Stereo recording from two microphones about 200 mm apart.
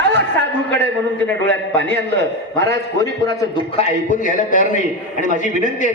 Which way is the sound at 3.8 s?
40° left (ahead or behind).